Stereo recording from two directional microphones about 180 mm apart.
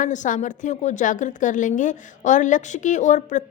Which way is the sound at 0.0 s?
45° left (ahead or behind).